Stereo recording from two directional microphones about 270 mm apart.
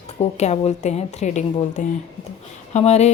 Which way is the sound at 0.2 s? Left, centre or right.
Left.